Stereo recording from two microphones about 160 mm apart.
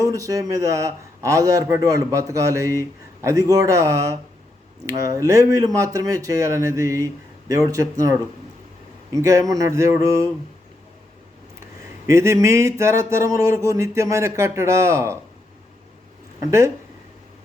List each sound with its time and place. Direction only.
0.0 s a man's voice: 20° right (ahead or behind)
12.0 s speech: 20° right (ahead or behind)
16.5 s a man's voice: 20° right (ahead or behind)